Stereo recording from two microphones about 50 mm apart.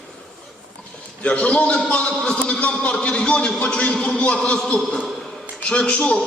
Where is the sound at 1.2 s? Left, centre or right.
Left.